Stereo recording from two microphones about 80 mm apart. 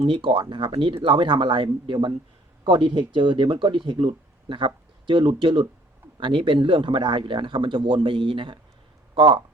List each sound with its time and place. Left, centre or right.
0.1 s speech: right